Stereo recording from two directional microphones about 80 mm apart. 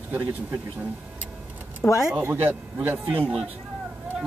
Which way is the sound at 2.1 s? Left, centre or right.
Right.